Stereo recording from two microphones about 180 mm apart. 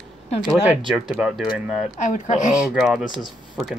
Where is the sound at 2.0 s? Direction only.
45° left (ahead or behind).